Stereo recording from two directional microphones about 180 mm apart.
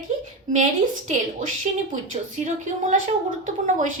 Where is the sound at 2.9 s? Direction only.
45° right (ahead or behind).